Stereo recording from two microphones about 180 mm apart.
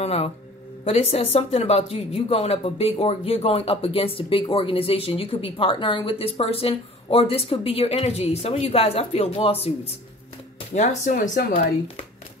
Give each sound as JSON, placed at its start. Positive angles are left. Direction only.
{"t": 0.0, "sound": "speech", "side_deg": 35}